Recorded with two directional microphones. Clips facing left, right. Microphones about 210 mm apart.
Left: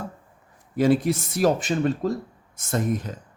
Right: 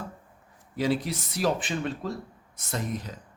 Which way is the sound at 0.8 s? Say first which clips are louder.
Left 7 dB; 50° left (ahead or behind).